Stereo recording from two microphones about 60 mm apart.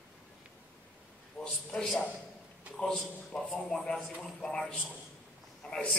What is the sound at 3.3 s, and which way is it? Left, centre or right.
Speech, centre.